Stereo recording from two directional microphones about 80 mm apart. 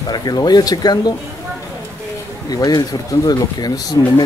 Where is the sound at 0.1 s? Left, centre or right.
Left.